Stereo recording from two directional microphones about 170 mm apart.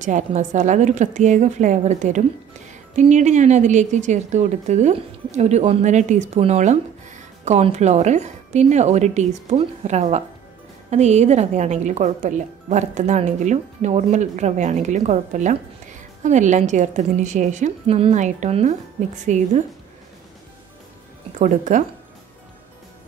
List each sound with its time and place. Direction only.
0.0 s speech: 45° right (ahead or behind)
21.4 s speech: 45° right (ahead or behind)